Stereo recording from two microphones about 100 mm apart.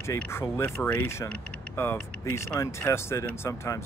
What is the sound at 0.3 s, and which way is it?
Speech, 25° left (ahead or behind).